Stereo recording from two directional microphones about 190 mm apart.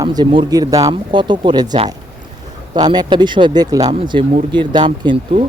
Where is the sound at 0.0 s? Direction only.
20° right (ahead or behind).